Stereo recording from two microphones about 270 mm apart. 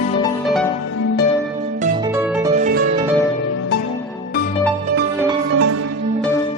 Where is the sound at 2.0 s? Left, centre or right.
Centre.